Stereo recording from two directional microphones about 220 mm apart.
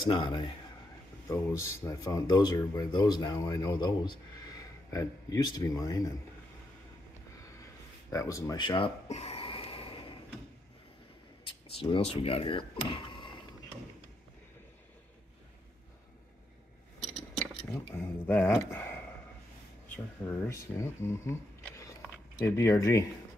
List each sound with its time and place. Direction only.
0.1 s a man's voice: 20° left (ahead or behind)
8.1 s a sound: 15° left (ahead or behind)
11.4 s speech: 25° left (ahead or behind)
17.6 s speech: 15° left (ahead or behind)
20.2 s a man's voice: 10° left (ahead or behind)